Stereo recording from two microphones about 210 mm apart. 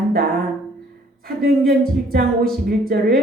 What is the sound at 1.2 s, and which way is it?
A woman's voice, 45° right (ahead or behind).